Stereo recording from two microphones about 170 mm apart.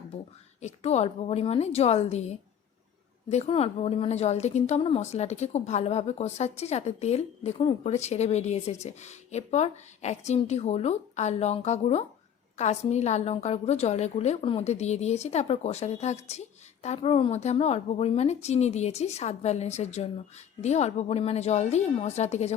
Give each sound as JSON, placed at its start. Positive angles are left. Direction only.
{"t": 0.6, "sound": "a woman's voice", "side_deg": 40}